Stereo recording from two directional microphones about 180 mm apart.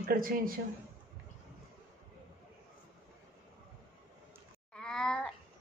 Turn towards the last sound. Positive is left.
turn(degrees=5)  # may be behind; listen again after turning